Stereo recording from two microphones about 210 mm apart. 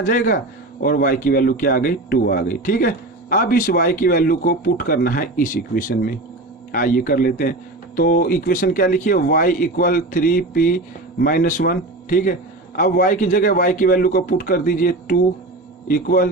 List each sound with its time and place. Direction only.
0.1 s speech: 40° left (ahead or behind)